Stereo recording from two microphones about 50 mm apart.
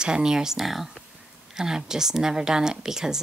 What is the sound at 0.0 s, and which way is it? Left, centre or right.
Speech, centre.